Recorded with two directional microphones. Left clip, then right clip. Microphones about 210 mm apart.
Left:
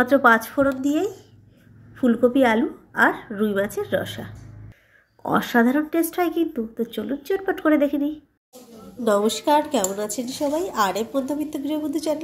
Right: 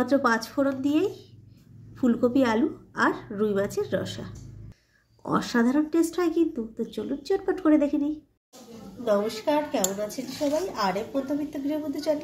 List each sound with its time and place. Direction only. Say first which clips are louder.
0.0 s speech: left 7 dB; centre (ahead or behind)
9.0 s a woman's voice: left 5 dB; 45° left (ahead or behind)